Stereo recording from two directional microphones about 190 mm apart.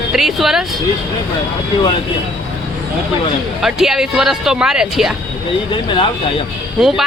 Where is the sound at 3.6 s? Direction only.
Centre (ahead or behind).